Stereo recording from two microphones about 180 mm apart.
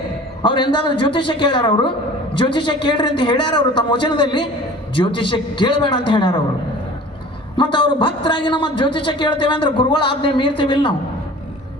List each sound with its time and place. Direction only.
0.4 s a man's voice: 25° left (ahead or behind)
7.5 s a man's voice: 25° left (ahead or behind)